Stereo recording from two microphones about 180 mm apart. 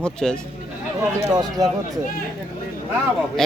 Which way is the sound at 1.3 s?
20° right (ahead or behind).